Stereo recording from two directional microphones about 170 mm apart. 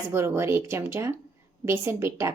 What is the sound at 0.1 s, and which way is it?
Speech, 15° right (ahead or behind).